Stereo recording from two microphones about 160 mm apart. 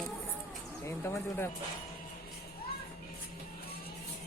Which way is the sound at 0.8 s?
15° left (ahead or behind).